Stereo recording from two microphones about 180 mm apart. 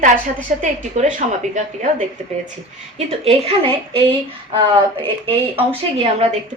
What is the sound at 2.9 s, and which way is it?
A woman's voice, 35° right (ahead or behind).